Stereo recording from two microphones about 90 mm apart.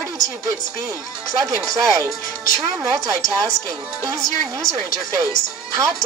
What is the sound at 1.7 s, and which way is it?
Speech, 40° right (ahead or behind).